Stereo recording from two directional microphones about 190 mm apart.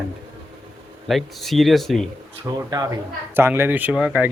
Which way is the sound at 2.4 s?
20° right (ahead or behind).